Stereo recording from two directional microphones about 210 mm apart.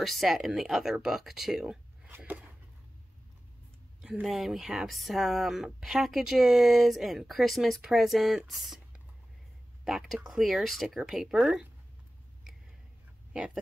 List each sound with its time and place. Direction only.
0.0 s speech: centre (ahead or behind)
4.0 s speech: centre (ahead or behind)